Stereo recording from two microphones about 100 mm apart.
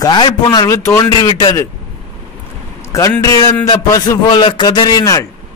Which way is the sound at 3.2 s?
40° left (ahead or behind).